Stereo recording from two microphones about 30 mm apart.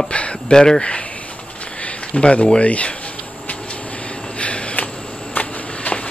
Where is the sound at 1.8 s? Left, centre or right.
Left.